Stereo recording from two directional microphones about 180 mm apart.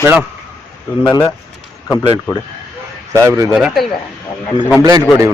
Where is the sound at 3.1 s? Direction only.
15° right (ahead or behind).